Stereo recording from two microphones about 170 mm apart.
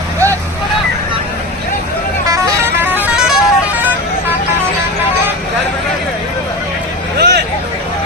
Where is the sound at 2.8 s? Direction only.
5° right (ahead or behind).